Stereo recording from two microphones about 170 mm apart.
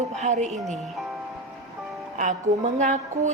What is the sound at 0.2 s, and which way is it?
Speech, 45° right (ahead or behind).